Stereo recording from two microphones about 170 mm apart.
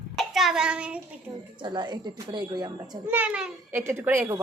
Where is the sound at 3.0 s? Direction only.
10° right (ahead or behind).